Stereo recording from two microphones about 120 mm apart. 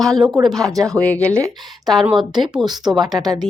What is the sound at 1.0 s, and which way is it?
Speech, 10° left (ahead or behind).